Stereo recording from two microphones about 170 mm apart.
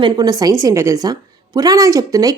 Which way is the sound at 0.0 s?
20° right (ahead or behind).